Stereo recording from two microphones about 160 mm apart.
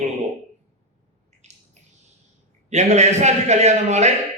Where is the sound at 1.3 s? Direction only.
45° right (ahead or behind).